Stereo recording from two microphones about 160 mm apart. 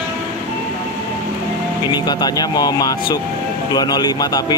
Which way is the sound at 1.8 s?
25° left (ahead or behind).